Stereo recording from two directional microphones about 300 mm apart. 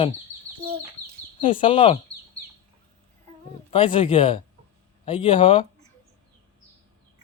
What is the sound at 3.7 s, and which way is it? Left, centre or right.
Speech, centre.